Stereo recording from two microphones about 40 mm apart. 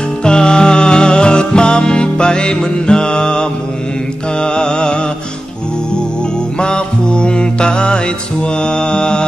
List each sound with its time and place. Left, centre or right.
0.2 s music: left
4.4 s mantra: left
6.6 s music: left
8.6 s mantra: left